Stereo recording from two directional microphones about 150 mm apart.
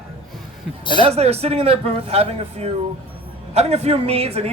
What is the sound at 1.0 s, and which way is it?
Speech, 45° right (ahead or behind).